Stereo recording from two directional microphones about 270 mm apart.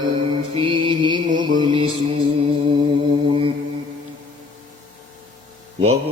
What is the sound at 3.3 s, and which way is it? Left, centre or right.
Mantra, centre.